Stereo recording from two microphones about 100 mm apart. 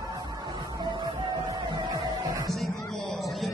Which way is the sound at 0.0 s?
40° right (ahead or behind).